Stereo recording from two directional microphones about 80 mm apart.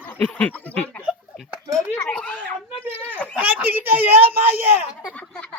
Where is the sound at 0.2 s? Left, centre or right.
Centre.